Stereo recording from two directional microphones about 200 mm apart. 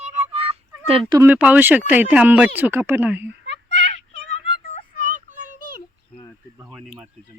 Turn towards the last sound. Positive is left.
turn(degrees=-5)  # may be behind; listen again after turning